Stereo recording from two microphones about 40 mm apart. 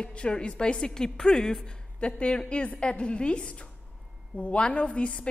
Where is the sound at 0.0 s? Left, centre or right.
Left.